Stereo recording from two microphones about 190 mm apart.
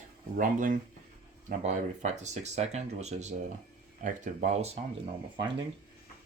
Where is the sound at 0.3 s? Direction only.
45° right (ahead or behind).